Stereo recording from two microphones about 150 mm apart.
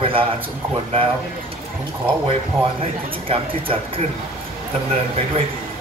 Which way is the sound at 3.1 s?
35° right (ahead or behind).